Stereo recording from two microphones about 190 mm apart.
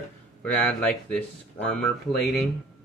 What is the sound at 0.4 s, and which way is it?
Speech, 5° left (ahead or behind).